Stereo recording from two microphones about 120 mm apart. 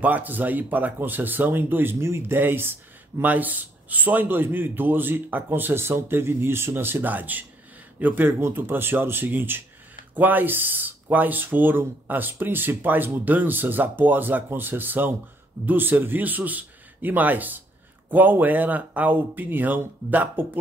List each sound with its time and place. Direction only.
0.0 s speech: 15° right (ahead or behind)